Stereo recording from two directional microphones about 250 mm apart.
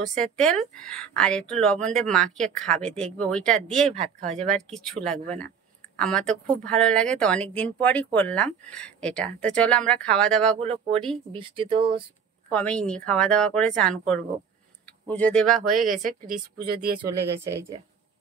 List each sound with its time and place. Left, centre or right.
0.2 s speech: centre
3.9 s speech: right
4.4 s speech: centre
10.6 s speech: right
12.4 s speech: centre
16.0 s a woman's voice: right